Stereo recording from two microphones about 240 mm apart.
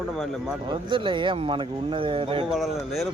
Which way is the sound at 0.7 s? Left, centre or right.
Right.